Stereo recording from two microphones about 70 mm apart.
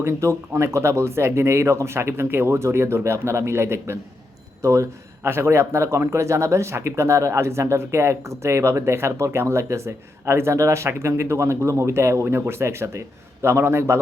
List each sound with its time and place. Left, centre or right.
0.0 s speech: right